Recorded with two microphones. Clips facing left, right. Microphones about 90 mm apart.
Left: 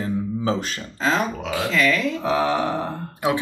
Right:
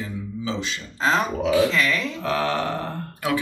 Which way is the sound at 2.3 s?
15° left (ahead or behind).